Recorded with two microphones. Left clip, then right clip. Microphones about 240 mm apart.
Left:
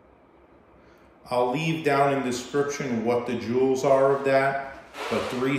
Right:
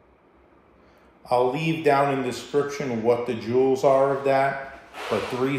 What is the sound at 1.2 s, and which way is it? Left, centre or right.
A man's voice, centre.